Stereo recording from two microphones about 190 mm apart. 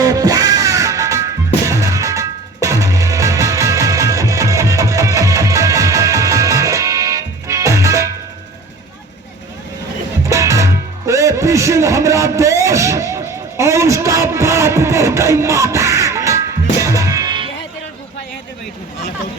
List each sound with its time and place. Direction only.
0.0 s music: 20° right (ahead or behind)
10.2 s music: 15° right (ahead or behind)